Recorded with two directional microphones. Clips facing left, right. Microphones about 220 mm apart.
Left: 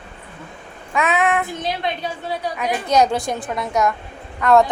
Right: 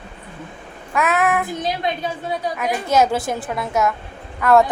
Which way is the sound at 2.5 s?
5° right (ahead or behind).